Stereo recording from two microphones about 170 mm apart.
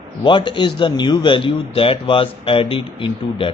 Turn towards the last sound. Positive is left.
turn(degrees=30)  # may be behind; listen again after turning